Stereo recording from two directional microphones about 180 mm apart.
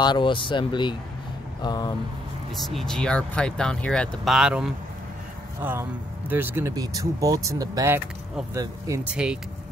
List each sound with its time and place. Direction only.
0.0 s speech: 25° left (ahead or behind)
2.5 s speech: centre (ahead or behind); by 9.0 s 20° right (ahead or behind)
9.0 s speech: 5° right (ahead or behind)